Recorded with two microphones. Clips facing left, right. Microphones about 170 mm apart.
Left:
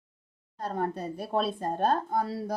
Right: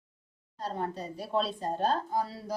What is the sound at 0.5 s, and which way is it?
Speech, 55° left (ahead or behind).